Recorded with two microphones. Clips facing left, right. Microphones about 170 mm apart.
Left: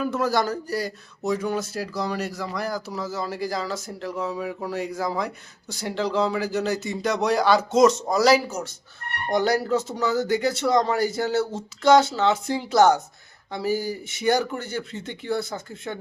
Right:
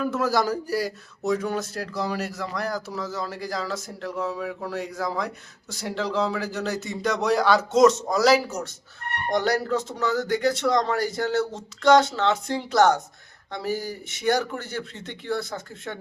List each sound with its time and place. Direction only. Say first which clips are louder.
0.0 s speech: even; centre (ahead or behind)